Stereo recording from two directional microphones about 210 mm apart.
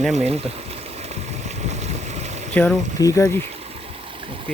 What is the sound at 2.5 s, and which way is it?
Speech, 5° left (ahead or behind).